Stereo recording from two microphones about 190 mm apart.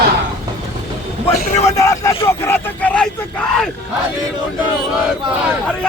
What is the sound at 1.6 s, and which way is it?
Speech, 15° left (ahead or behind).